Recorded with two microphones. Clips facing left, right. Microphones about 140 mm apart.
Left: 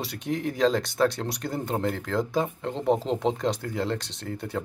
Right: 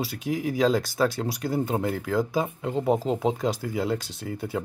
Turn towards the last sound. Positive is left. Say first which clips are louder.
# right 2 dB
turn(degrees=-5)  # may be behind; listen again after turning